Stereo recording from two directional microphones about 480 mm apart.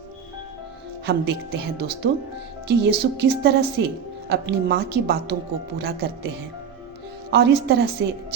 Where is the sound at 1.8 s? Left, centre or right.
Centre.